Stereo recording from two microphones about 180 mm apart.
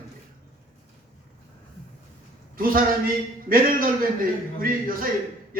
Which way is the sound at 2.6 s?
50° right (ahead or behind).